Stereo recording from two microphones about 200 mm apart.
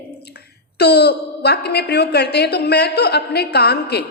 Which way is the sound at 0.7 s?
55° left (ahead or behind).